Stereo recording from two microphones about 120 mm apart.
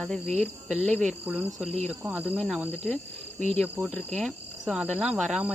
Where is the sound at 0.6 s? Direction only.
5° right (ahead or behind).